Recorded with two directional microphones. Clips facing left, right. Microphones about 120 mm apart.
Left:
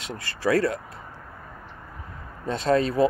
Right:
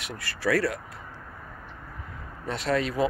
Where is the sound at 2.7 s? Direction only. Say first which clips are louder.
Left 5 dB; 35° left (ahead or behind).